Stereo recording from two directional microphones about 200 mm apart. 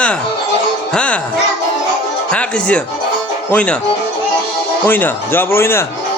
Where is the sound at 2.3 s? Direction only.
5° left (ahead or behind).